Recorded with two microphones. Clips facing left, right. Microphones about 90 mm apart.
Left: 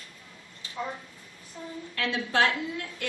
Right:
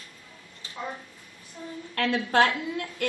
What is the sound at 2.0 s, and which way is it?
A woman's voice, 50° right (ahead or behind).